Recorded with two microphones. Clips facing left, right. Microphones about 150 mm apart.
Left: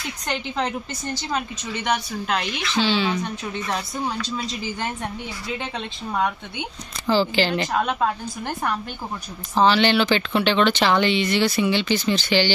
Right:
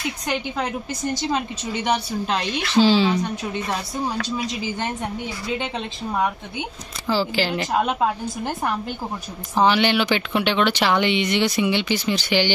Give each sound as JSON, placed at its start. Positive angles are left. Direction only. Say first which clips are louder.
{"t": 0.3, "sound": "speech", "louder": "left 1 dB", "side_deg": -5}
{"t": 1.1, "sound": "speech", "louder": "right 1 dB", "side_deg": -20}
{"t": 2.7, "sound": "speech", "louder": "right 5 dB", "side_deg": -35}
{"t": 7.1, "sound": "speech", "louder": "left 2 dB", "side_deg": -5}
{"t": 7.7, "sound": "speech", "louder": "right 5 dB", "side_deg": -20}
{"t": 9.6, "sound": "speech", "louder": "left 1 dB", "side_deg": -15}